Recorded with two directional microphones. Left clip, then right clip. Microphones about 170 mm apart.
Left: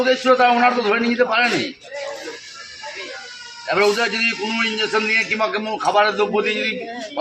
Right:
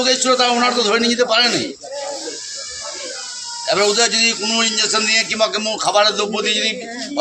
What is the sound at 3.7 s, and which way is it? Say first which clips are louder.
Speech: right 2 dB; 25° right (ahead or behind).